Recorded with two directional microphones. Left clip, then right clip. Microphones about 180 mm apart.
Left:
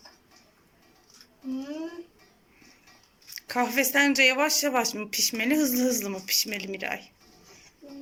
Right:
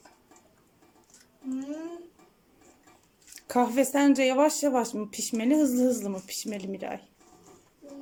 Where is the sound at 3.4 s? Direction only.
20° right (ahead or behind).